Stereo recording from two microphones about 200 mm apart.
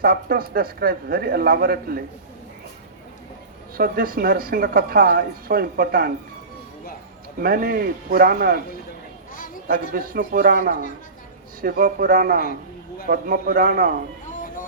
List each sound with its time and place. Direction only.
0.0 s a woman's voice: 45° right (ahead or behind)
3.8 s a woman's voice: 45° right (ahead or behind)
7.3 s a woman's voice: 45° right (ahead or behind)
9.9 s a woman's voice: 45° right (ahead or behind)